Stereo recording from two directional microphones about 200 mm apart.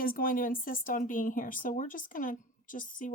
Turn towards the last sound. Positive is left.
turn(degrees=40)  # may be behind; listen again after turning